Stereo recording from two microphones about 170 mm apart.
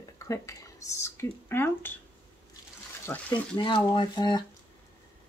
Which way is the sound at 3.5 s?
25° left (ahead or behind).